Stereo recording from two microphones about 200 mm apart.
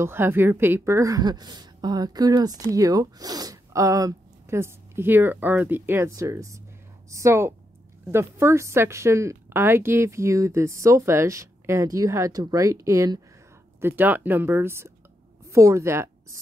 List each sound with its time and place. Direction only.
0.0 s a woman's voice: 10° right (ahead or behind)